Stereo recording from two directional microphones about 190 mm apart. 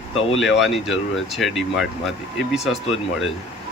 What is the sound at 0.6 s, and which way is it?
A man's voice, 5° right (ahead or behind).